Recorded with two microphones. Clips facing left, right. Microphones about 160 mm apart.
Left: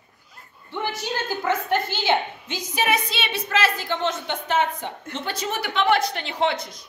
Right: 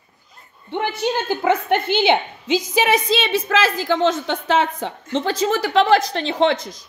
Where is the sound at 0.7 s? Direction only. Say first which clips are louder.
Right 6 dB; 60° right (ahead or behind); by 6.8 s 90° right.